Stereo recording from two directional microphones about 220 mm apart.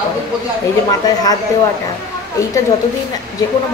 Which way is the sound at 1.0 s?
15° left (ahead or behind).